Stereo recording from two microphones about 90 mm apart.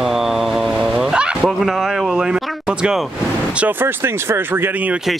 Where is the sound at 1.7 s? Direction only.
Centre (ahead or behind).